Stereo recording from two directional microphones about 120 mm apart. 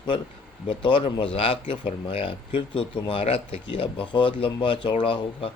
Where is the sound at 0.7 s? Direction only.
45° left (ahead or behind).